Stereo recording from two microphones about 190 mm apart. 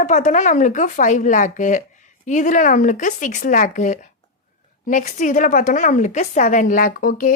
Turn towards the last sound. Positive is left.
turn(degrees=45)  # may be behind; listen again after turning